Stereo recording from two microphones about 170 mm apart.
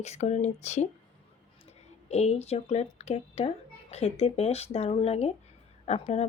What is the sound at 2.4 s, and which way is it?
Speech, 40° left (ahead or behind).